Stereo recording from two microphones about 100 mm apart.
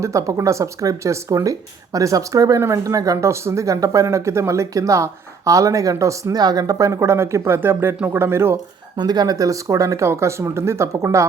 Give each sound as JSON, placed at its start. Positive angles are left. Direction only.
{"t": 0.0, "sound": "speech", "side_deg": -30}
{"t": 9.0, "sound": "speech", "side_deg": -45}